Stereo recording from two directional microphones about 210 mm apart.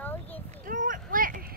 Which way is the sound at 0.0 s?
10° left (ahead or behind).